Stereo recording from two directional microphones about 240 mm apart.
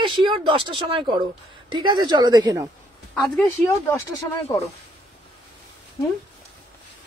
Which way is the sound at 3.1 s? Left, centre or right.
Centre.